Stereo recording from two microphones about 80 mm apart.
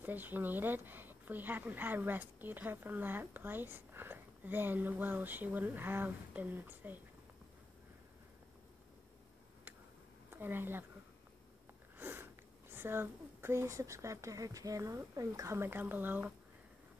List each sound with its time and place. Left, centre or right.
0.0 s a woman's voice: right
10.3 s a woman's voice: right
12.0 s sniff: right
12.7 s a woman's voice: right